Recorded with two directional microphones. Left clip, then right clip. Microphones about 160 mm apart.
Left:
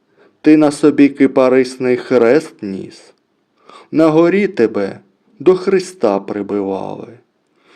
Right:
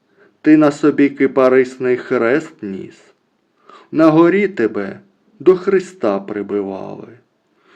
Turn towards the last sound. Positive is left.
turn(degrees=45)  # may be behind; listen again after turning